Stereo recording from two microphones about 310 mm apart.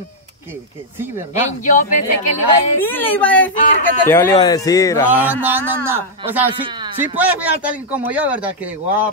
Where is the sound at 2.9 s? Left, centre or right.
Centre.